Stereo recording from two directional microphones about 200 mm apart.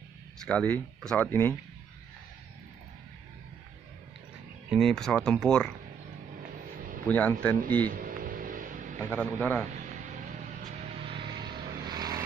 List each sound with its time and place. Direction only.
0.5 s speech: 5° left (ahead or behind)
4.6 s speech: centre (ahead or behind)
7.1 s speech: 10° left (ahead or behind)
7.9 s vehicle: 45° right (ahead or behind)
9.1 s speech: 5° left (ahead or behind)
9.7 s a sound: 40° right (ahead or behind)
11.0 s vehicle: 30° right (ahead or behind)